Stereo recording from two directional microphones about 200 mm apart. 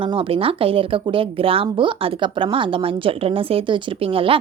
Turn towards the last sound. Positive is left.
turn(degrees=-25)  # may be behind; listen again after turning